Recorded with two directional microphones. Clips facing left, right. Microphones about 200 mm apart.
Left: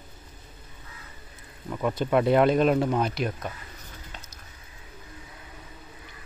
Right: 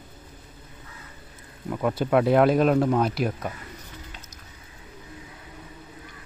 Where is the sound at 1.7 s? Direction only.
5° right (ahead or behind).